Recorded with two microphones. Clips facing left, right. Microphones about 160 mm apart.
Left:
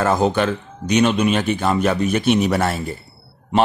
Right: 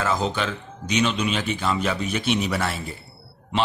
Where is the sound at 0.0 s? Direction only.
55° left (ahead or behind).